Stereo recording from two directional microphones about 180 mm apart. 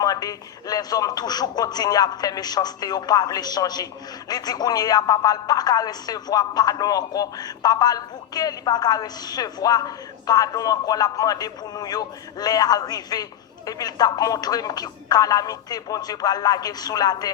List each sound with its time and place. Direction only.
0.0 s speech: 20° left (ahead or behind)